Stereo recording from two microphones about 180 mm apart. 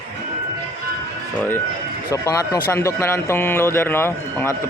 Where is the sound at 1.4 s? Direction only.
10° left (ahead or behind).